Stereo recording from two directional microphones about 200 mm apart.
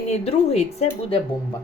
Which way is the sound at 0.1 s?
30° left (ahead or behind).